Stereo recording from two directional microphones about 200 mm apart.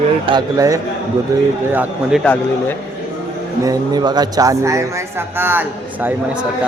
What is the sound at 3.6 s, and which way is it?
Speech, 20° right (ahead or behind).